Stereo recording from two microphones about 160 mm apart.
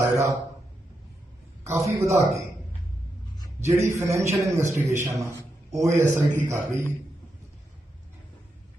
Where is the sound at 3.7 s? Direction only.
15° right (ahead or behind).